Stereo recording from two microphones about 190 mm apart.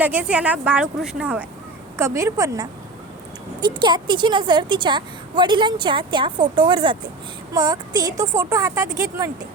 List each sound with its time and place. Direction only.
0.0 s a woman's voice: 10° right (ahead or behind)